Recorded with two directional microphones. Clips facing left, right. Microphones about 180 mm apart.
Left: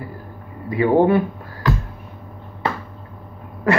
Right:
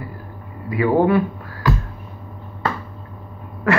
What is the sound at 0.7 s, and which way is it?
Speech, 30° left (ahead or behind).